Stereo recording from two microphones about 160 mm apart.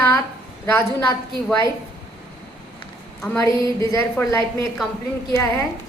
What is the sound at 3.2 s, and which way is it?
A woman's voice, 20° left (ahead or behind).